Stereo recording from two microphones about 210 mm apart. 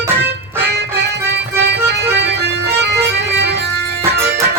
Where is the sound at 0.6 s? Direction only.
55° right (ahead or behind).